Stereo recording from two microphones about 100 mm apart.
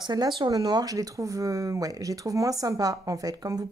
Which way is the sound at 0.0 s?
45° right (ahead or behind).